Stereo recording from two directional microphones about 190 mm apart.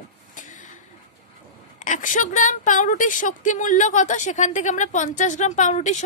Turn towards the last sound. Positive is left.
turn(degrees=40)  # may be behind; listen again after turning